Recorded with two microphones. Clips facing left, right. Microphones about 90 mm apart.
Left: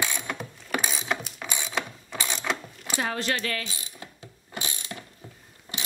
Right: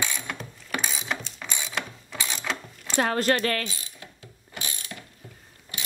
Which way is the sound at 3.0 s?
50° right (ahead or behind).